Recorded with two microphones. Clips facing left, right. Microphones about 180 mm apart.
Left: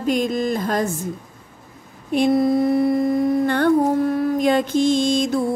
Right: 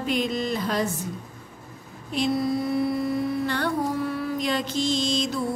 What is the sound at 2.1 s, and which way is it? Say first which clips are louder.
Humming: left 7 dB; 55° left (ahead or behind).